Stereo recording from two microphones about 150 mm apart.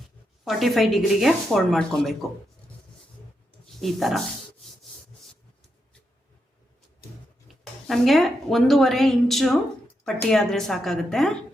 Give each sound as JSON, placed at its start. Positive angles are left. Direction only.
{"t": 0.4, "sound": "a woman's voice", "side_deg": 0}
{"t": 3.8, "sound": "a woman's voice", "side_deg": 0}
{"t": 7.6, "sound": "a woman's voice", "side_deg": 0}